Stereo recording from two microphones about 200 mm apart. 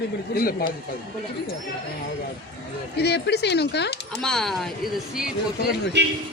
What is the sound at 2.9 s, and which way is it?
Speech, 55° left (ahead or behind).